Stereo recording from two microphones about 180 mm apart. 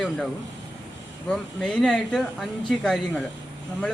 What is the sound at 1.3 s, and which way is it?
A woman's voice, 5° left (ahead or behind).